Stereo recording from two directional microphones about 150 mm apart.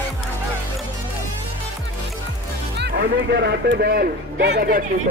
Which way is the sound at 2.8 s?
90° right.